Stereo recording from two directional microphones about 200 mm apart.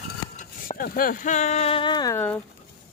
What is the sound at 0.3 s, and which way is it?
Speech, 45° left (ahead or behind).